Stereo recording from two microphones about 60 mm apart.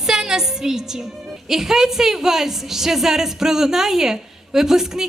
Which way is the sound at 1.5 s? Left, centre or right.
Centre.